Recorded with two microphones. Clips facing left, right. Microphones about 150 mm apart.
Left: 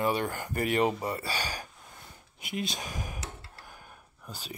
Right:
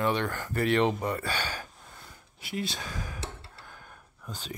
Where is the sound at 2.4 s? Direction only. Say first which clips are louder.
Even; 20° left (ahead or behind).